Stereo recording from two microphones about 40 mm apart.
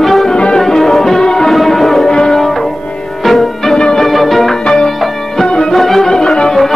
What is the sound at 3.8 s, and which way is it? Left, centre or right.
Music, centre.